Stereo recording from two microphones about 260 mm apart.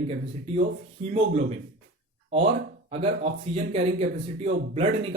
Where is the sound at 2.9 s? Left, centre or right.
Right.